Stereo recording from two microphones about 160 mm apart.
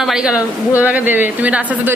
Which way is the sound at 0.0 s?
5° right (ahead or behind).